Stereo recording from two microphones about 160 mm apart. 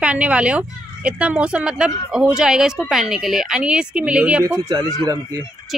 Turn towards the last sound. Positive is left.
turn(degrees=-25)  # may be behind; listen again after turning